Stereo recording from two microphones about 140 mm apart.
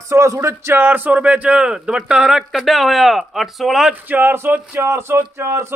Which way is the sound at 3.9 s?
15° right (ahead or behind).